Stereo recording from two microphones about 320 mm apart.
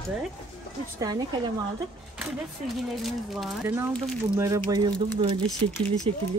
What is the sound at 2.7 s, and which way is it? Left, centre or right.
Speech, centre.